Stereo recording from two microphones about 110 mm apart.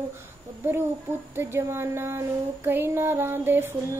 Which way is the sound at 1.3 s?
20° right (ahead or behind).